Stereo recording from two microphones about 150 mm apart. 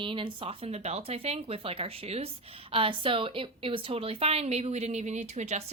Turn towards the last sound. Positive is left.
turn(degrees=-50)  # may be behind; listen again after turning